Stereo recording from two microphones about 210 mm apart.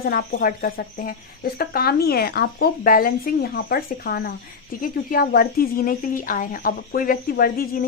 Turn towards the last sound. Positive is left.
turn(degrees=45)  # may be behind; listen again after turning